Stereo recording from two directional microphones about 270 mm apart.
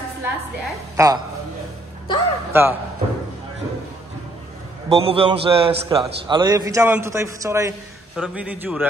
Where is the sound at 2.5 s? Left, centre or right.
Centre.